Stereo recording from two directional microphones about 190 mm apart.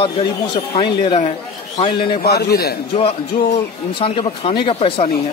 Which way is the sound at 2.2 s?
55° left (ahead or behind).